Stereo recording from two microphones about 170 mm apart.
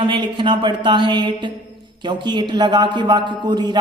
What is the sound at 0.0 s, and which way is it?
A man's voice, 30° right (ahead or behind).